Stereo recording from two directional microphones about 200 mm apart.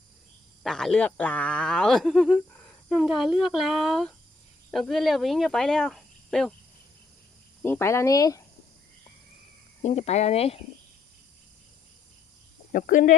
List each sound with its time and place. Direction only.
0.6 s speech: centre (ahead or behind)
7.6 s speech: 10° left (ahead or behind)
9.8 s speech: 35° left (ahead or behind)
12.7 s speech: 40° left (ahead or behind)